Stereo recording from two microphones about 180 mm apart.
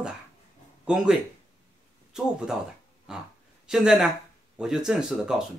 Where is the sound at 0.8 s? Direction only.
5° right (ahead or behind).